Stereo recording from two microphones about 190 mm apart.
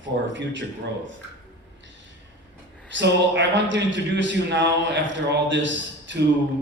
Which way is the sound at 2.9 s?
70° right (ahead or behind).